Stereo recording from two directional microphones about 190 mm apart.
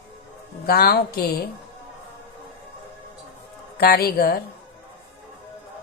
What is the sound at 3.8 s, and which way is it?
Speech, 50° left (ahead or behind).